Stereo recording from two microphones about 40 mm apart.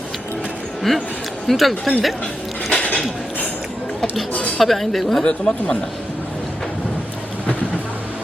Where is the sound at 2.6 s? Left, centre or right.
Left.